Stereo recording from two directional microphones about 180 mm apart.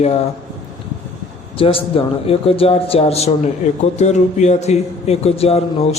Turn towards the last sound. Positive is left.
turn(degrees=35)  # may be behind; listen again after turning